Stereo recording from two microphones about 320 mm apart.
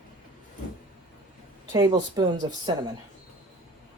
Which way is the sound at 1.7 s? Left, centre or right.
Centre.